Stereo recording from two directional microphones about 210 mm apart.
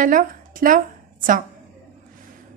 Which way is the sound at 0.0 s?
40° right (ahead or behind).